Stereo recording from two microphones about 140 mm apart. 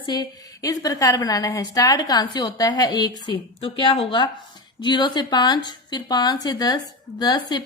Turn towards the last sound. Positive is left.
turn(degrees=30)  # may be behind; listen again after turning